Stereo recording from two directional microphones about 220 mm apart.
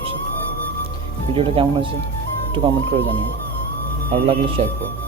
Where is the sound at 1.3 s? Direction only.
25° right (ahead or behind).